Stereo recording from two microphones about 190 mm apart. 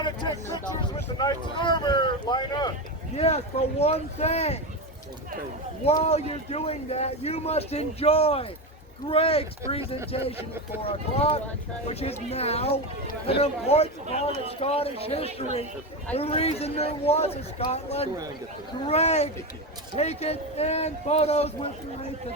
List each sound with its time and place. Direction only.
0.8 s speech: 25° left (ahead or behind)
3.2 s a man's voice: 35° left (ahead or behind)
5.8 s a man's voice: 35° left (ahead or behind)